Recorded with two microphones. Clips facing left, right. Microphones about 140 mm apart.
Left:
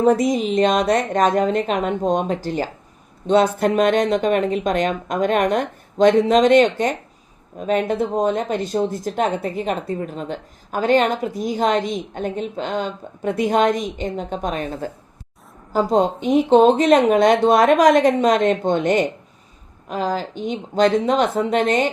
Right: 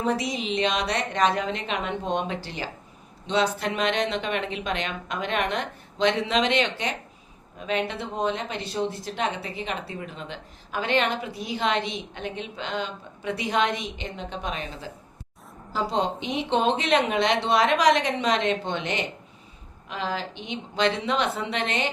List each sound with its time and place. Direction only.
0.0 s speech: 45° left (ahead or behind)